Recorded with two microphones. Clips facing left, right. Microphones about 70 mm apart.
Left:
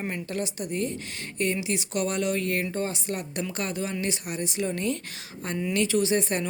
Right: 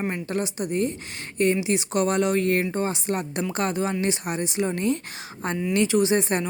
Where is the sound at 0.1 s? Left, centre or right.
Right.